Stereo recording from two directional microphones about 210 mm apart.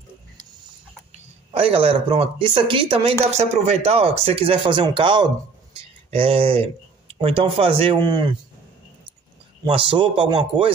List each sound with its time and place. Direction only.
1.5 s speech: 25° right (ahead or behind)
9.7 s speech: 25° right (ahead or behind)